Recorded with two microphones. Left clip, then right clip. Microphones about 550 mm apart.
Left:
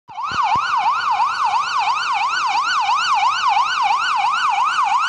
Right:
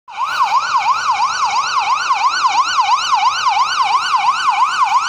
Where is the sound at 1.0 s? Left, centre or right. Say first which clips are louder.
Right 2 dB; left.